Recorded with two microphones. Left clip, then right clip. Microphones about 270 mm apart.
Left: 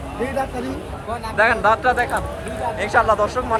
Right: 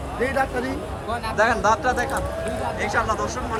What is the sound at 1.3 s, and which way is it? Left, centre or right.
Speech, centre.